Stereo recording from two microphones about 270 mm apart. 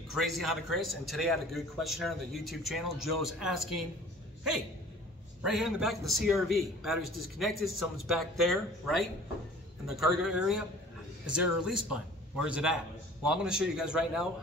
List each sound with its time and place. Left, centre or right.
0.1 s a man's voice: centre
3.0 s speech: right
3.3 s a man's voice: centre
5.4 s a man's voice: centre
12.4 s a man's voice: centre